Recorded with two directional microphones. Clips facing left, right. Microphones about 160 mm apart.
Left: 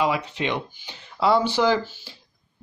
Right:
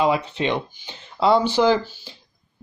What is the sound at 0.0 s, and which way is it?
Speech, 30° right (ahead or behind).